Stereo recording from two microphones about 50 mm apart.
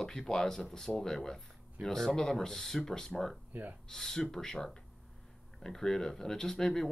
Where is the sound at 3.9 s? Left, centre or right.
Centre.